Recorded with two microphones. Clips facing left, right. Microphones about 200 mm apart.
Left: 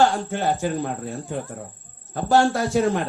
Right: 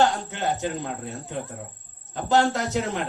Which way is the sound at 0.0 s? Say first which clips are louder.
Left 3 dB; 20° right (ahead or behind).